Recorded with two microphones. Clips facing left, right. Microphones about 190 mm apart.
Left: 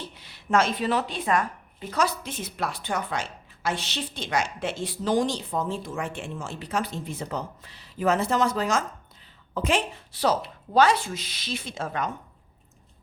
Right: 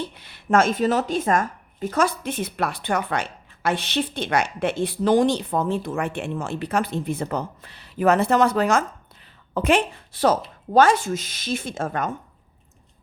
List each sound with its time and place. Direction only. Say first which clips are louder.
0.1 s a woman's voice: right 2 dB; 60° right (ahead or behind)